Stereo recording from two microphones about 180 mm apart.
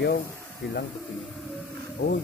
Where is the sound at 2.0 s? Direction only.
50° left (ahead or behind).